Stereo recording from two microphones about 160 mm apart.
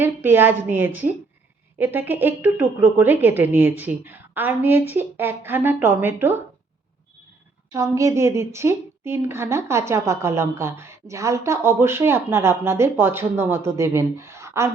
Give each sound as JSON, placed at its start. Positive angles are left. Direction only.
{"t": 0.0, "sound": "a woman's voice", "side_deg": -15}
{"t": 7.7, "sound": "a woman's voice", "side_deg": -20}